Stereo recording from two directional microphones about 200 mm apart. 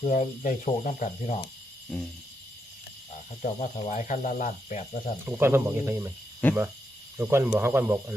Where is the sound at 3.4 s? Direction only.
40° left (ahead or behind).